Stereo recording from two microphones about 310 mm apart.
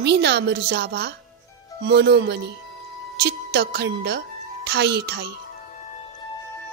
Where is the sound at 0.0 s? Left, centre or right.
Right.